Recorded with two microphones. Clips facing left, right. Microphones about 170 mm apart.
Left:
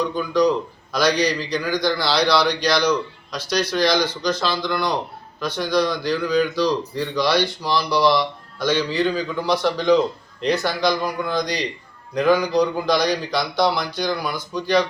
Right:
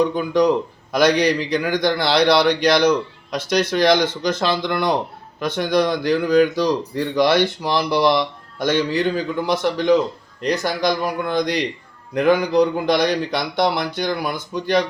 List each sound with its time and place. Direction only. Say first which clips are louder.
0.0 s a man's voice: right 2 dB; 55° right (ahead or behind)